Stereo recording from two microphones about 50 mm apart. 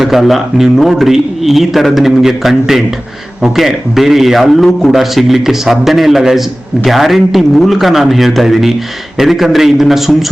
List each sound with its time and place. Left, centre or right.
0.0 s a man's voice: centre